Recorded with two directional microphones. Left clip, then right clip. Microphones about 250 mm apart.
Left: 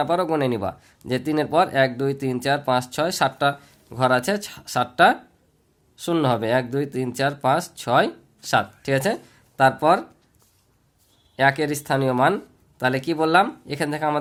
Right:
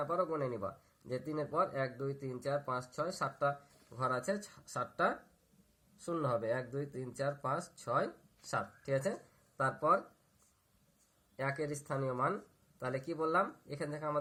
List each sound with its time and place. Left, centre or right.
0.0 s speech: left
11.3 s speech: left